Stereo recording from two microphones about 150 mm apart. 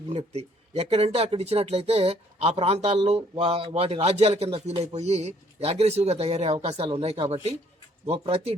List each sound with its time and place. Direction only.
0.1 s a man's voice: 45° right (ahead or behind)